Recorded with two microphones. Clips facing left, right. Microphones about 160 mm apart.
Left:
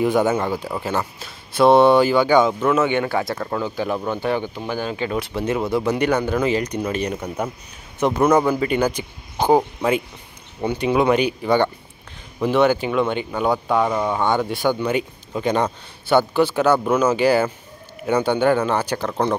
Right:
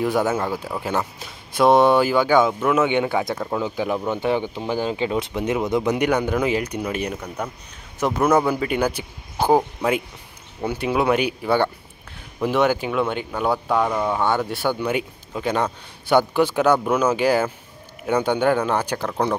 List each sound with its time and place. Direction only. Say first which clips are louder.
0.0 s speech: left 3 dB; centre (ahead or behind)
0.9 s speech: even; 10° right (ahead or behind)
7.4 s speech: left 3 dB; 5° left (ahead or behind)
14.0 s speech: left 1 dB; 5° right (ahead or behind)
16.1 s speech: left 1 dB; 15° right (ahead or behind)
18.0 s a man's voice: left 1 dB; 5° left (ahead or behind)
18.3 s speech: left 2 dB; 5° right (ahead or behind)